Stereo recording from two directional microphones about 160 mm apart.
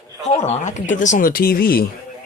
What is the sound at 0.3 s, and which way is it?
Speech, 50° left (ahead or behind).